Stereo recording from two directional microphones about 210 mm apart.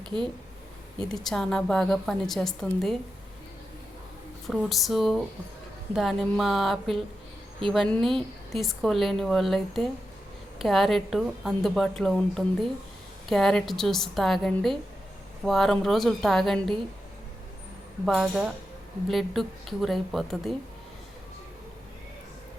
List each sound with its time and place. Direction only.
0.0 s speech: 20° right (ahead or behind)
1.0 s a woman's voice: centre (ahead or behind)
4.4 s a woman's voice: centre (ahead or behind)
18.0 s a woman's voice: centre (ahead or behind)